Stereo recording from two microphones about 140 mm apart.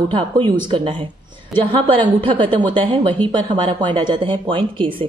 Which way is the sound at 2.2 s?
40° right (ahead or behind).